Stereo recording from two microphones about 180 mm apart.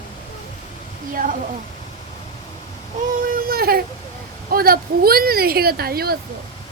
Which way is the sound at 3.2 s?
55° right (ahead or behind).